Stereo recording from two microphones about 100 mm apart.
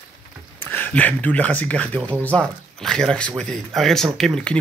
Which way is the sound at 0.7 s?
15° left (ahead or behind).